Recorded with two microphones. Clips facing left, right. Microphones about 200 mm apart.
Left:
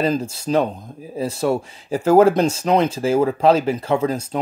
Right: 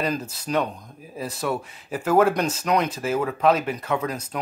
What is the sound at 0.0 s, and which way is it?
Speech, 25° left (ahead or behind).